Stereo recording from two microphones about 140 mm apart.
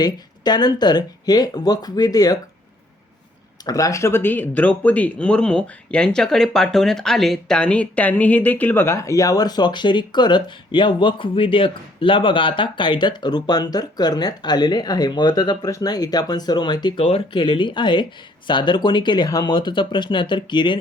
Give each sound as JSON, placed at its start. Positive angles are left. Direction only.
{"t": 0.0, "sound": "speech", "side_deg": 30}
{"t": 3.7, "sound": "speech", "side_deg": 25}